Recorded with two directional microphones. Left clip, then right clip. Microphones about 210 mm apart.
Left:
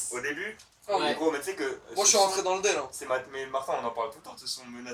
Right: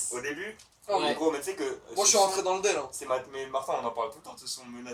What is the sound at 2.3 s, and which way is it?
Speech, 25° right (ahead or behind).